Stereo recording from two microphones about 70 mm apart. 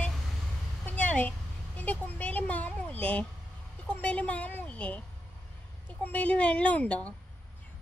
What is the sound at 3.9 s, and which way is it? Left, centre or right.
A woman's voice, centre.